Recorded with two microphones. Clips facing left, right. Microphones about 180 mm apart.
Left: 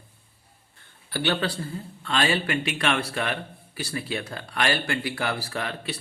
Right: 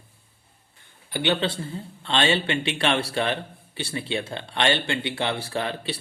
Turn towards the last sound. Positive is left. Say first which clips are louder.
# right 3 dB
turn(degrees=-30)  # may be behind; listen again after turning